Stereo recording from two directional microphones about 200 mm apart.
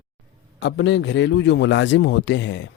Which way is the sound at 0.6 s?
60° left (ahead or behind).